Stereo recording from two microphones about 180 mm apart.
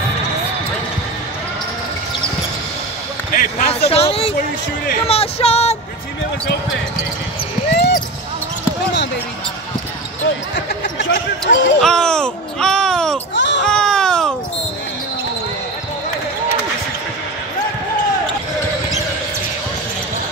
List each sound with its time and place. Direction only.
3.3 s a man's voice: 35° left (ahead or behind)
7.7 s basketball bounce: 65° left (ahead or behind)
10.5 s speech: 65° left (ahead or behind)
11.8 s speech: 5° left (ahead or behind)
13.3 s basketball bounce: 80° left
13.7 s baby cry: 5° left (ahead or behind)